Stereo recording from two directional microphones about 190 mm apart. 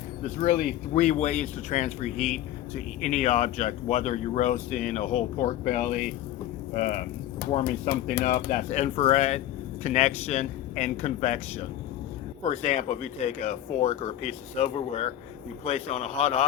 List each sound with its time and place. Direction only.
0.2 s speech: 40° left (ahead or behind)
12.4 s speech: 35° left (ahead or behind)